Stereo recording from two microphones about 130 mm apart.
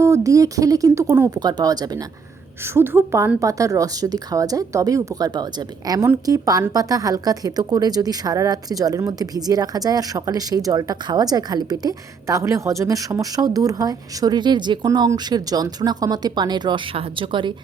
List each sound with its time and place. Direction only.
0.0 s a woman's voice: 25° right (ahead or behind)
2.7 s a woman's voice: 15° right (ahead or behind); by 17.5 s 40° right (ahead or behind)